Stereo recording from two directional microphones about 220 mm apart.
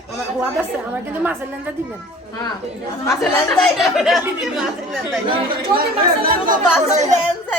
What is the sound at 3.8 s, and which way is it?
Speech, centre (ahead or behind).